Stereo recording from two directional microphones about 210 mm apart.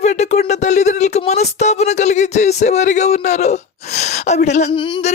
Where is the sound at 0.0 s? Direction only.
30° left (ahead or behind).